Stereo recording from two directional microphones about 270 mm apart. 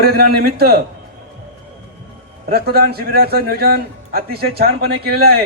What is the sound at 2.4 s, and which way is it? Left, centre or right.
A man's voice, right.